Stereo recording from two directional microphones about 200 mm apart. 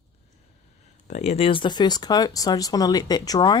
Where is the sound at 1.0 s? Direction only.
35° left (ahead or behind).